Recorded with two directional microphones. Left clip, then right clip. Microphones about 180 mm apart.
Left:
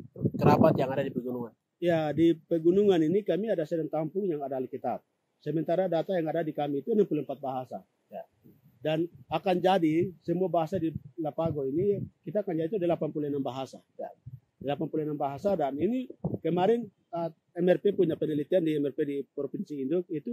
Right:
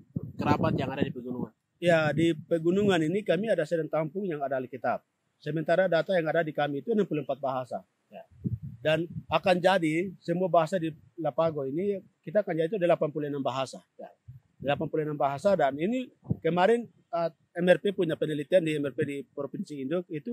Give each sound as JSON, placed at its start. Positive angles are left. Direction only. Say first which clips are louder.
{"t": 0.4, "sound": "speech", "louder": "left 5 dB", "side_deg": 20}
{"t": 1.8, "sound": "speech", "louder": "right 2 dB", "side_deg": -45}
{"t": 8.8, "sound": "a man's voice", "louder": "right 3 dB", "side_deg": -45}